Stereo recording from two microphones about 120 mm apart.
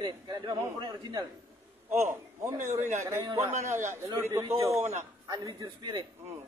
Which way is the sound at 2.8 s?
80° right.